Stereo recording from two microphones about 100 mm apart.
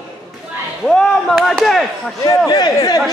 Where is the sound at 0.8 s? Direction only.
5° left (ahead or behind).